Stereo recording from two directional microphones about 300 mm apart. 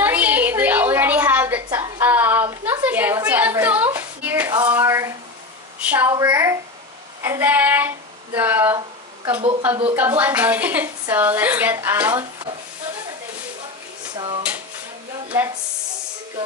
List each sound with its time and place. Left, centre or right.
0.0 s a sound: centre
5.8 s a woman's voice: centre
14.1 s a woman's voice: centre